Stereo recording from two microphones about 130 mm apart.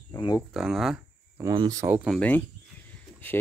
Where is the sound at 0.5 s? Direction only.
5° right (ahead or behind).